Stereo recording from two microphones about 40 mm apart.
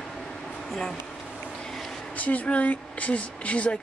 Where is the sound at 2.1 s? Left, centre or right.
Left.